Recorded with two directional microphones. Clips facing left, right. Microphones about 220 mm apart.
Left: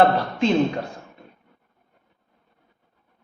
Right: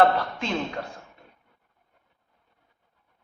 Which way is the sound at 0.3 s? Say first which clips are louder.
Left 10 dB; 25° left (ahead or behind).